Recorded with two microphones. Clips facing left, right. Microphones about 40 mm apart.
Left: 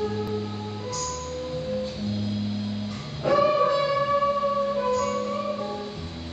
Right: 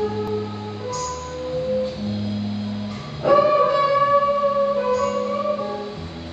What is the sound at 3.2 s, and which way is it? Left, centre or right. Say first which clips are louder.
Music: right 5 dB; centre.